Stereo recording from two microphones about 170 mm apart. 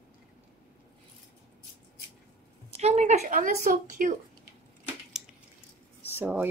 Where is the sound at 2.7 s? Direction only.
40° right (ahead or behind).